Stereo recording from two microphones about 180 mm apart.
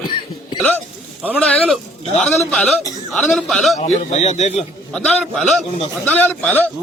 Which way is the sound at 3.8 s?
35° left (ahead or behind).